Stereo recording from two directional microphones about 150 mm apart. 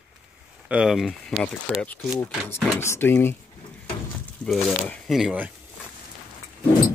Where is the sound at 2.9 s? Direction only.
15° left (ahead or behind).